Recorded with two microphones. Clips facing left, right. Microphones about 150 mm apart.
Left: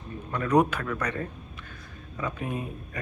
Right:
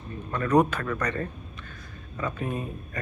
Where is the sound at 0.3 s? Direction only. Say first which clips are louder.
Right 1 dB; 10° left (ahead or behind).